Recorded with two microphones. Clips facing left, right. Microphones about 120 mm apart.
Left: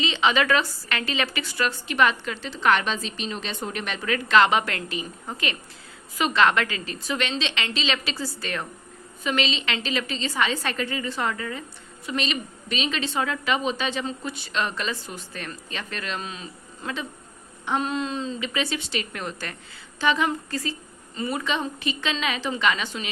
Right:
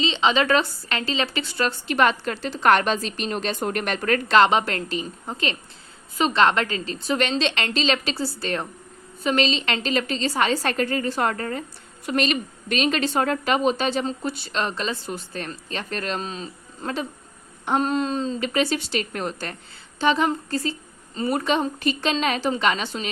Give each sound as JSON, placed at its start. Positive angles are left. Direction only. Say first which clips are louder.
{"t": 0.0, "sound": "a woman's voice", "louder": "right 2 dB", "side_deg": -25}
{"t": 4.3, "sound": "a woman's voice", "louder": "right 1 dB", "side_deg": -35}
{"t": 6.1, "sound": "a woman's voice", "louder": "right 2 dB", "side_deg": -30}
{"t": 21.2, "sound": "a woman's voice", "louder": "right 5 dB", "side_deg": -45}